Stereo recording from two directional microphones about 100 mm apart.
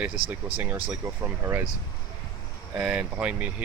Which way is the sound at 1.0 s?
25° right (ahead or behind).